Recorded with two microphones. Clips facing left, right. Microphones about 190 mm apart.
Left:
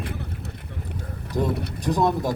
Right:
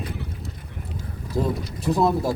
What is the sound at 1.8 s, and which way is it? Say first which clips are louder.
Speech: right 1 dB; 5° right (ahead or behind).